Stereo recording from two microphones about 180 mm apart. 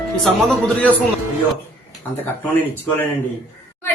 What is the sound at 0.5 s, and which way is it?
Music, 10° left (ahead or behind).